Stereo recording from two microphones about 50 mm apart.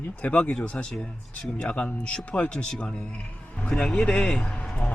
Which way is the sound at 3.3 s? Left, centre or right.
Left.